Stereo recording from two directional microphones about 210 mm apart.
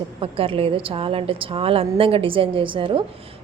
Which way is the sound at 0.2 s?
25° right (ahead or behind).